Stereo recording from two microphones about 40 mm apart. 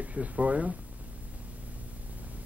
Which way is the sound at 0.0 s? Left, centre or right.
Right.